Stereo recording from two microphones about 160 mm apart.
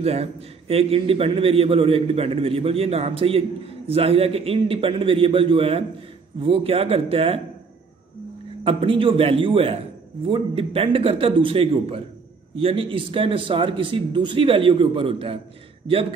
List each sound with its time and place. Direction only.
0.0 s a man's voice: 40° right (ahead or behind)
8.6 s a man's voice: 35° right (ahead or behind)